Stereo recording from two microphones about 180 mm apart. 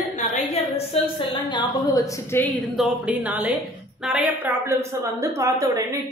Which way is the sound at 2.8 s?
5° right (ahead or behind).